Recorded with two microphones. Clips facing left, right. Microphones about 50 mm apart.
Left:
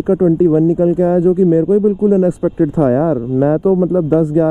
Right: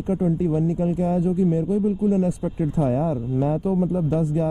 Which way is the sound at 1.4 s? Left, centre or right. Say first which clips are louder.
Left 10 dB; left.